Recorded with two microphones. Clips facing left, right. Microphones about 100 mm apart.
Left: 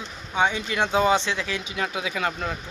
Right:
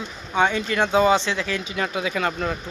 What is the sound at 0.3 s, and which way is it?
Speech, 15° left (ahead or behind).